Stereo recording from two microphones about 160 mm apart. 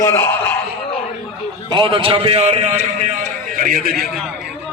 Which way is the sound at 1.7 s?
30° right (ahead or behind).